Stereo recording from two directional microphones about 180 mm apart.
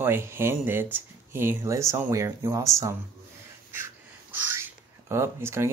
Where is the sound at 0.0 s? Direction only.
15° right (ahead or behind).